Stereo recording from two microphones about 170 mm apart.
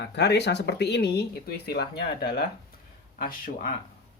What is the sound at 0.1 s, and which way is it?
Speech, 85° left.